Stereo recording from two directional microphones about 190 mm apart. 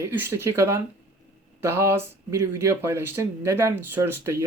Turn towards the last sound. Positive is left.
turn(degrees=-15)  # may be behind; listen again after turning